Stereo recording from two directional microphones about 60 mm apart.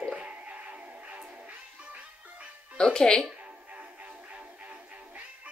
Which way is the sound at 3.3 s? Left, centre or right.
Right.